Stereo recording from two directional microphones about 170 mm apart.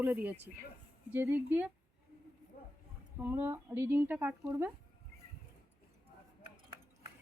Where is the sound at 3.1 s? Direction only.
15° right (ahead or behind).